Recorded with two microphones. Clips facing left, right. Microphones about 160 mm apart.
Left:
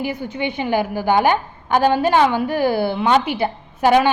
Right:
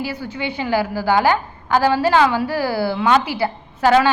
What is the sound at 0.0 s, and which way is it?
A woman's voice, 20° left (ahead or behind).